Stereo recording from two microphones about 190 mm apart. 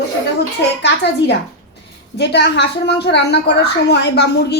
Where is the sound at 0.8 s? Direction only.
65° left (ahead or behind).